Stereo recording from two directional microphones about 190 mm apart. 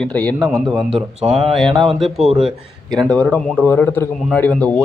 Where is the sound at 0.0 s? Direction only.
5° left (ahead or behind).